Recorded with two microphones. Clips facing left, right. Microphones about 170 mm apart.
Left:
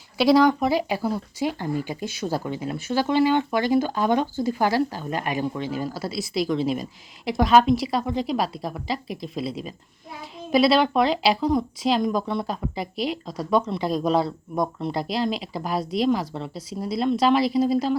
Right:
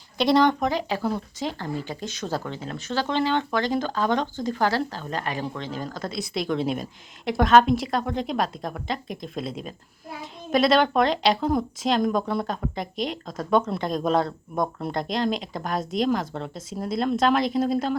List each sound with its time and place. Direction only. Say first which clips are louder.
0.2 s speech: left 2 dB; centre (ahead or behind)